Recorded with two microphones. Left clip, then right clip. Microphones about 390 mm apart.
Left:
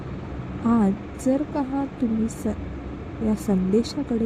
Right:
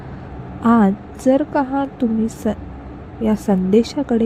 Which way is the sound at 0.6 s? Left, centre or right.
Centre.